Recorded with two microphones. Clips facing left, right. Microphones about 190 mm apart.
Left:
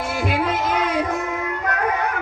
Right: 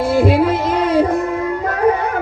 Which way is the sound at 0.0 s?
30° right (ahead or behind).